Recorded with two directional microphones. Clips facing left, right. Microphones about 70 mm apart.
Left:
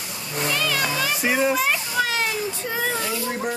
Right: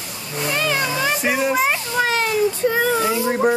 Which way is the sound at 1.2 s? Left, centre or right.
Centre.